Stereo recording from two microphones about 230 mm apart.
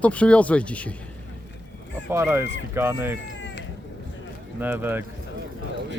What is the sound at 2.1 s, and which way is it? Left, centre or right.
Speech, centre.